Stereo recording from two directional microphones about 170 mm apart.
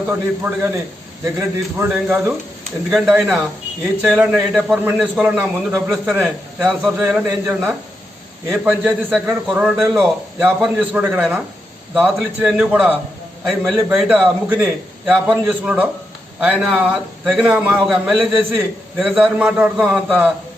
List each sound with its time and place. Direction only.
0.1 s a man's voice: 15° right (ahead or behind)